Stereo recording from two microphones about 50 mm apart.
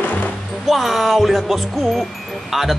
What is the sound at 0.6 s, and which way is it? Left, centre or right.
Speech, centre.